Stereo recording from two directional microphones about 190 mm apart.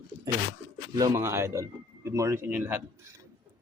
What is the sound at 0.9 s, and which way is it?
A man's voice, 15° right (ahead or behind).